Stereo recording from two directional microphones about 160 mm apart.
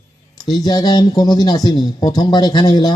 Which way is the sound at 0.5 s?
25° left (ahead or behind).